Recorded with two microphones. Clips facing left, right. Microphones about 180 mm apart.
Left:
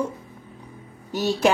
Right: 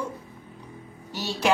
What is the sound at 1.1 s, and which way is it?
Speech, 50° left (ahead or behind).